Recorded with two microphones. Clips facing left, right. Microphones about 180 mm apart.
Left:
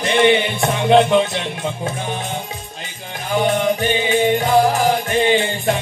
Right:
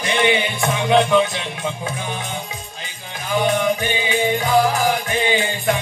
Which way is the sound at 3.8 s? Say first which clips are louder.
Left 4 dB; 40° left (ahead or behind).